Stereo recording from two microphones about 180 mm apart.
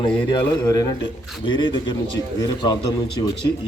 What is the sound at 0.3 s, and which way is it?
A man's voice, 25° left (ahead or behind).